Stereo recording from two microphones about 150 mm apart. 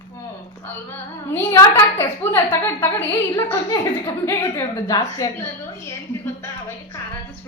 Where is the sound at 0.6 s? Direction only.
15° left (ahead or behind).